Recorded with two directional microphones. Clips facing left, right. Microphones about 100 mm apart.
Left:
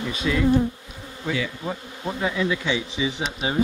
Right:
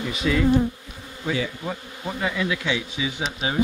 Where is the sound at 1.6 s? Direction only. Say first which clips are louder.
Left 1 dB; 5° left (ahead or behind).